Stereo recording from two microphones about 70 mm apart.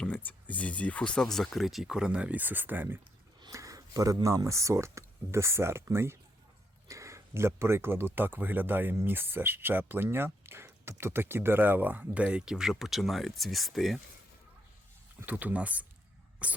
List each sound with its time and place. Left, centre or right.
0.0 s speech: left; by 3.0 s right
3.5 s a sound: right
4.4 s speech: right; by 14.0 s centre
15.3 s speech: right